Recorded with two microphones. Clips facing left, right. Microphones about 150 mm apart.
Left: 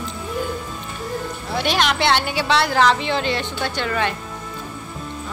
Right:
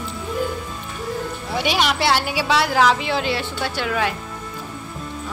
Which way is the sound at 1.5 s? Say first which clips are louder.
Even; 10° right (ahead or behind).